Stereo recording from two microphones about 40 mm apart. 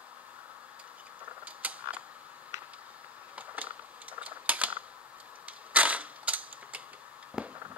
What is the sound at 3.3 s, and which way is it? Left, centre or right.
Camera, right.